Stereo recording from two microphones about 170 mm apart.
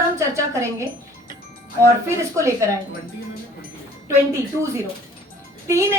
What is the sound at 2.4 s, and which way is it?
Speech, 15° right (ahead or behind).